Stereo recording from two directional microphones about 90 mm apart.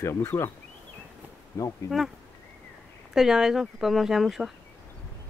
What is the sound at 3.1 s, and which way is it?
Speech, 5° right (ahead or behind).